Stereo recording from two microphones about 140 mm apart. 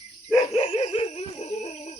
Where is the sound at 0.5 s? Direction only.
40° left (ahead or behind).